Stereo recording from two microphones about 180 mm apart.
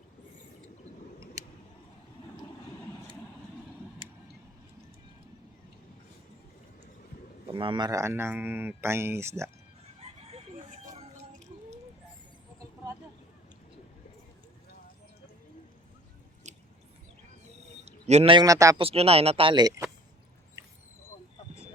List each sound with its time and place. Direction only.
7.4 s speech: 30° right (ahead or behind)
10.8 s a sound: 45° right (ahead or behind)
17.8 s a man's voice: 35° right (ahead or behind); by 18.8 s 20° right (ahead or behind)
18.8 s speech: 30° right (ahead or behind)